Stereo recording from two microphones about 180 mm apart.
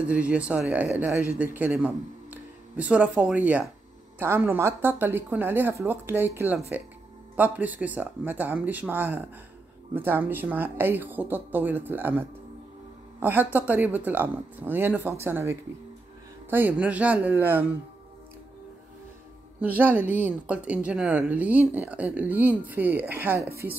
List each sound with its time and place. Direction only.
0.1 s speech: 5° right (ahead or behind)
19.8 s speech: 10° right (ahead or behind)